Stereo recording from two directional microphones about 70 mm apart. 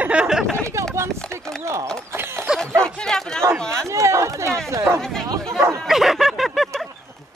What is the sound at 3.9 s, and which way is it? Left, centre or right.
Chatter, right.